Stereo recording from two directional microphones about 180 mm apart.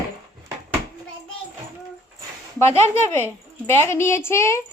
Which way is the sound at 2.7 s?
35° right (ahead or behind).